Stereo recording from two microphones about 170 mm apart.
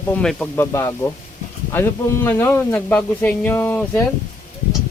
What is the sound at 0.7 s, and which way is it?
Speech, 15° left (ahead or behind).